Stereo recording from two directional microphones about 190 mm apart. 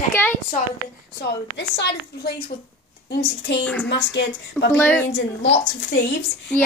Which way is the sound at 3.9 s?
65° left (ahead or behind).